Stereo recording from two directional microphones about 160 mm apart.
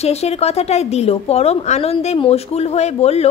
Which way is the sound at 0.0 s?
40° left (ahead or behind).